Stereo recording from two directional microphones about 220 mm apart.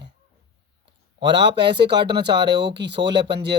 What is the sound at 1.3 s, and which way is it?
Speech, 50° right (ahead or behind).